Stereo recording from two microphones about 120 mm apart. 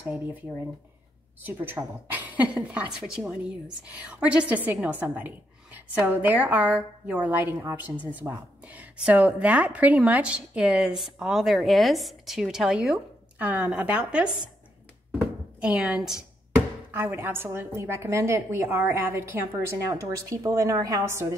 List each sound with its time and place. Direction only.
0.0 s a woman's voice: 15° right (ahead or behind)
16.9 s a woman's voice: 20° right (ahead or behind)